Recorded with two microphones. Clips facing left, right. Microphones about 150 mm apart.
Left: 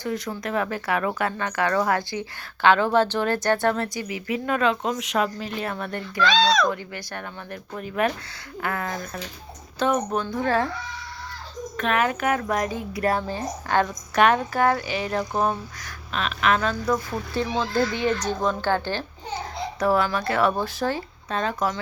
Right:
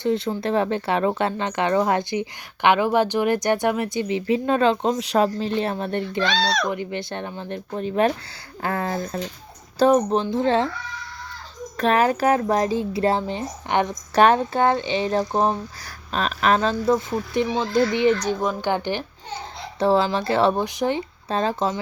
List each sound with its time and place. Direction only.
0.0 s speech: 25° right (ahead or behind)
11.8 s speech: 35° right (ahead or behind); by 19.0 s 15° right (ahead or behind)
19.8 s speech: 25° right (ahead or behind)
21.2 s speech: 30° right (ahead or behind)